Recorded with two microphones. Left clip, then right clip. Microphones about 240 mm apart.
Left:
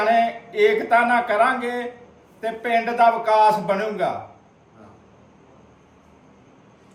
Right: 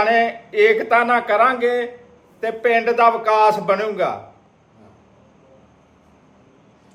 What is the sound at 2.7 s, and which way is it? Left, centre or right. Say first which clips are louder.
Speech: right 1 dB; right.